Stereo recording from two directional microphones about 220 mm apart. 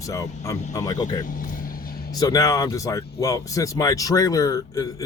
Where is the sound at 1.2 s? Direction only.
40° left (ahead or behind).